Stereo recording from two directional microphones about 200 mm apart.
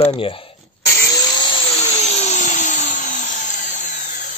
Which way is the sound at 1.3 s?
25° left (ahead or behind).